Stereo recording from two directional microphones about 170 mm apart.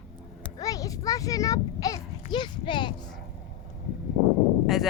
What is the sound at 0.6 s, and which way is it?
A child's voice, 20° left (ahead or behind).